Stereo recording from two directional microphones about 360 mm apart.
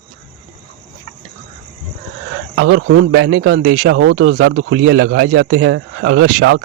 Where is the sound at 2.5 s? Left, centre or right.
Right.